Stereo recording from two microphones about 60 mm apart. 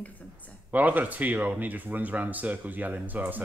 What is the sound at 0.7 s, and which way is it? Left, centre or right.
Speech, right.